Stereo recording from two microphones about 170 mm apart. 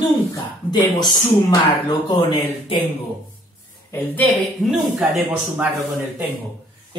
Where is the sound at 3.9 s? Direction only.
10° left (ahead or behind).